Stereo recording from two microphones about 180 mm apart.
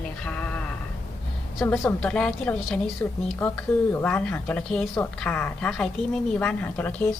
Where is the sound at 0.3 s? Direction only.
5° left (ahead or behind).